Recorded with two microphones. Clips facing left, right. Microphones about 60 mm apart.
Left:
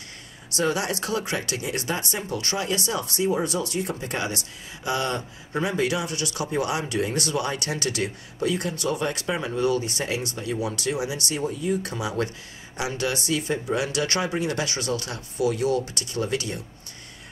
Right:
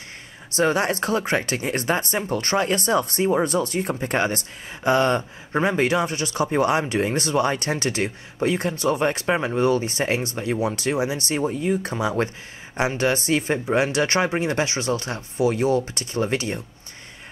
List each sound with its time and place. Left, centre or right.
0.5 s speech: right